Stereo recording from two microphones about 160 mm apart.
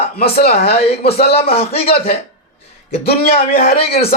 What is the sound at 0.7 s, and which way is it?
Speech, 40° left (ahead or behind).